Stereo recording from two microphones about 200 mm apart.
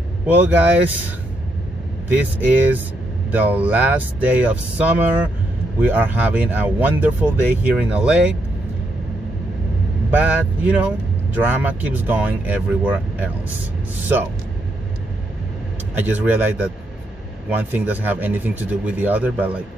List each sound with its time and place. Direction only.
0.3 s speech: 10° right (ahead or behind)
2.1 s speech: 10° right (ahead or behind)
10.1 s speech: 5° right (ahead or behind)
15.9 s speech: 10° right (ahead or behind)